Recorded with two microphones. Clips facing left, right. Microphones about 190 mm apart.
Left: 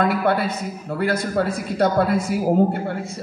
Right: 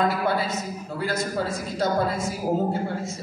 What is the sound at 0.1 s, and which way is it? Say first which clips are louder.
A man's voice: left 4 dB; 60° left (ahead or behind).